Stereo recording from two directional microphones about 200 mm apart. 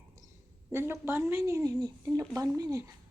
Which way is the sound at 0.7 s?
10° right (ahead or behind).